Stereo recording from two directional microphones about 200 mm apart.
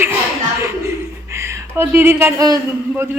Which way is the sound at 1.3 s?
15° right (ahead or behind).